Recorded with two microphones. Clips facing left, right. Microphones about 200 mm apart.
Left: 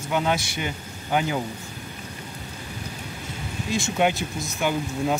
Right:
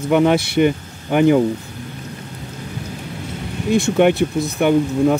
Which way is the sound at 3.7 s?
60° right (ahead or behind).